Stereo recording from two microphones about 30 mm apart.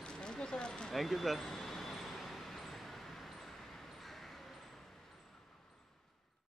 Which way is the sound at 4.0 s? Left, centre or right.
Centre.